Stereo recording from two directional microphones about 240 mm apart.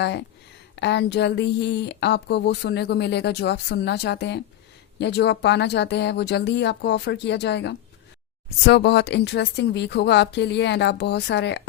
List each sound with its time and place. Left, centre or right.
0.0 s speech: left